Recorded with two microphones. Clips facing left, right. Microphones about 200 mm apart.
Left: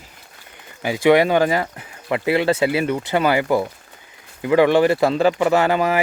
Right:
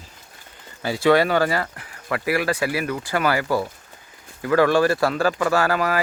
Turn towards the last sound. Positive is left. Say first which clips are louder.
# left 3 dB
turn(degrees=20)  # may be behind; listen again after turning